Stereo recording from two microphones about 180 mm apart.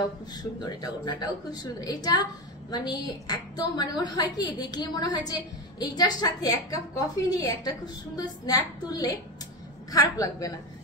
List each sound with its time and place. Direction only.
0.3 s a woman's voice: 20° left (ahead or behind)